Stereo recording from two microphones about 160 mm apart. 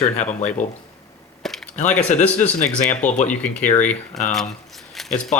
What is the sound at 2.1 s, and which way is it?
Speech, 50° left (ahead or behind).